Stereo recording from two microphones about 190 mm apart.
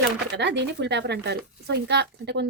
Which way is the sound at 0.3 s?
65° right (ahead or behind).